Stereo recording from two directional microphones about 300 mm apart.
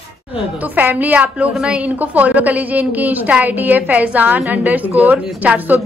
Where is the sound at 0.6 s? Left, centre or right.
Centre.